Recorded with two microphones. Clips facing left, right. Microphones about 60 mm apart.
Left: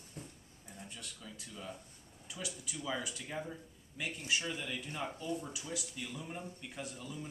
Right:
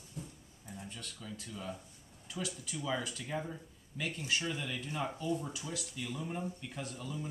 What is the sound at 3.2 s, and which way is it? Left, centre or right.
Speech, centre.